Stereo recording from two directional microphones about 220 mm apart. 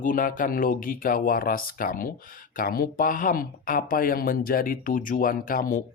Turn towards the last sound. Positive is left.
turn(degrees=40)  # may be behind; listen again after turning